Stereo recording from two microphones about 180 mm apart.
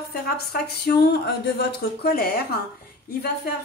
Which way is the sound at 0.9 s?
65° left (ahead or behind).